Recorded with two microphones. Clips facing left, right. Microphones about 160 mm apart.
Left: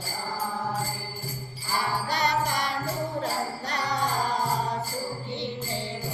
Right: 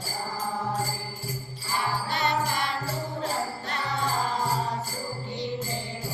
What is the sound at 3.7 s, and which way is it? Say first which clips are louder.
Music: left 3 dB; 40° left (ahead or behind).